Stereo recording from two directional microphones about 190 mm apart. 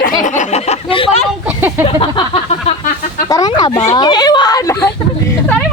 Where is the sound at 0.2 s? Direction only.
40° left (ahead or behind).